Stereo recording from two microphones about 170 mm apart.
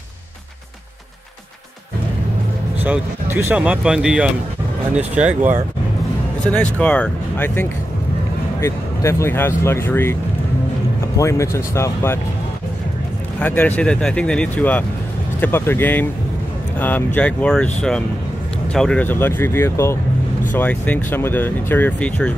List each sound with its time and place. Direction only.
2.8 s speech: 10° right (ahead or behind)
6.5 s speech: 5° left (ahead or behind)
11.1 s speech: 15° left (ahead or behind)
13.4 s speech: 10° left (ahead or behind)